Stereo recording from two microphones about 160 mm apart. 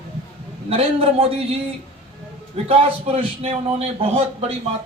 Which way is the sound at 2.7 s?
40° right (ahead or behind).